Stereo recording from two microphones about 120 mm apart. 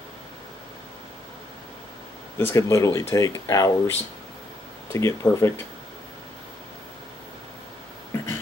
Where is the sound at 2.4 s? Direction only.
20° left (ahead or behind).